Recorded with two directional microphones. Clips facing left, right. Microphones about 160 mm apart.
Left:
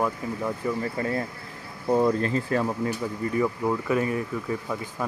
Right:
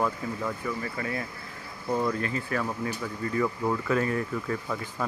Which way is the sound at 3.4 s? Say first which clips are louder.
Left 2 dB; 10° left (ahead or behind).